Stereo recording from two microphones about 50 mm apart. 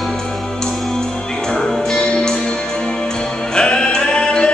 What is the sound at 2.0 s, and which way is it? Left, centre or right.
Music, centre.